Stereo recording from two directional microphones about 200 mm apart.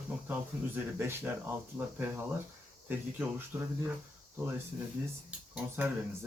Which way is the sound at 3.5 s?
10° right (ahead or behind).